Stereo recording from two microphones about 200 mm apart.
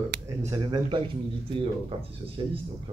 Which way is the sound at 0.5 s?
20° right (ahead or behind).